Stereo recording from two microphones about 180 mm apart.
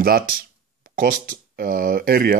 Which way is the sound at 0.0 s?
55° right (ahead or behind).